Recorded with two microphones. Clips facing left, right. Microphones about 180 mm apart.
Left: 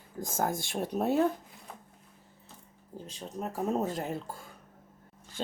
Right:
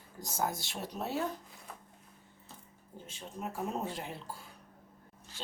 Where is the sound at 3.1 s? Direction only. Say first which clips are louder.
Left 4 dB; 35° left (ahead or behind).